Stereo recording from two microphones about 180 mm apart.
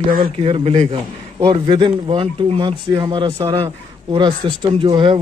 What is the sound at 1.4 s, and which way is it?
Speech, 25° right (ahead or behind).